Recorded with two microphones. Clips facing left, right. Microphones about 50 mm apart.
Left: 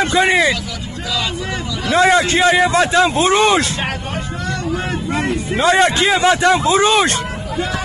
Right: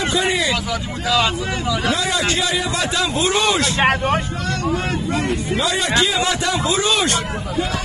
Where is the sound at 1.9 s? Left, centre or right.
Left.